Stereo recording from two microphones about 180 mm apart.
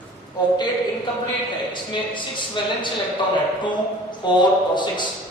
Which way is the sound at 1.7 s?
25° left (ahead or behind).